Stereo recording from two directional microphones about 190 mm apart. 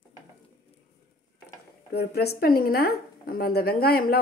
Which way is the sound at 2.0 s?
55° left (ahead or behind).